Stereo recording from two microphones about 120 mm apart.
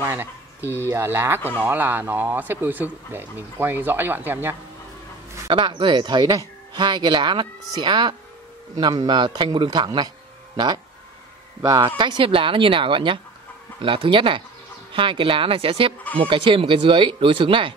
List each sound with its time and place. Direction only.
0.0 s speech: 20° right (ahead or behind)
5.5 s speech: 40° right (ahead or behind)
9.9 s a sound: 35° right (ahead or behind)
11.6 s speech: 35° right (ahead or behind)
12.0 s speech: 45° right (ahead or behind)